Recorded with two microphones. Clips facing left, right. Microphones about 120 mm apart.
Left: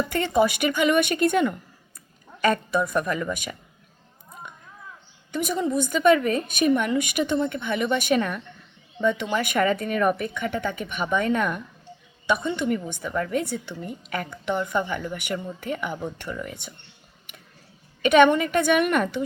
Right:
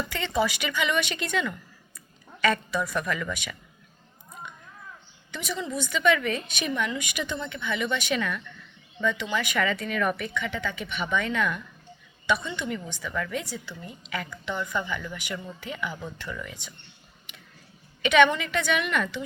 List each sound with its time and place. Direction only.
0.0 s a woman's voice: 45° left (ahead or behind)
5.3 s a woman's voice: 45° left (ahead or behind)
16.3 s a woman's voice: 40° left (ahead or behind)
17.3 s tick-tock: 50° left (ahead or behind)
18.0 s a woman's voice: 45° left (ahead or behind)